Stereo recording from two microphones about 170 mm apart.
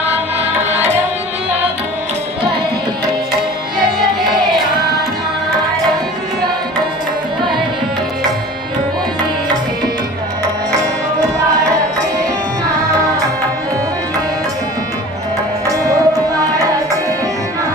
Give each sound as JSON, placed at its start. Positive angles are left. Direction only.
{"t": 15.6, "sound": "music", "side_deg": -20}